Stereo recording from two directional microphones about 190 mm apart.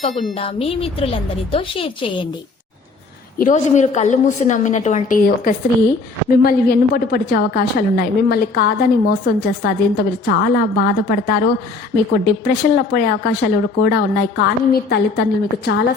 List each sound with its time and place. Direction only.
0.1 s speech: centre (ahead or behind)
0.3 s a woman's voice: 30° left (ahead or behind)
3.3 s a woman's voice: 40° left (ahead or behind); by 15.8 s 60° left (ahead or behind)